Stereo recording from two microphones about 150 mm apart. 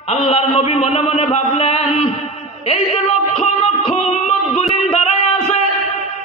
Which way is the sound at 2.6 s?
45° left (ahead or behind).